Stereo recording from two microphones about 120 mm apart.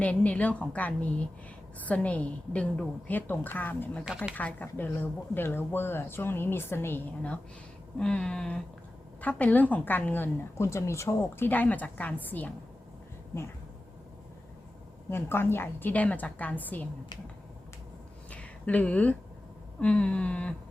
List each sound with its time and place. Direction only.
0.0 s a woman's voice: 10° left (ahead or behind)
15.1 s a woman's voice: 20° left (ahead or behind)
18.3 s a sound: 10° left (ahead or behind)
19.8 s a woman's voice: 10° left (ahead or behind)